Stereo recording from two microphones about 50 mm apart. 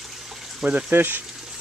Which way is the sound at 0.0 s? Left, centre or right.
Centre.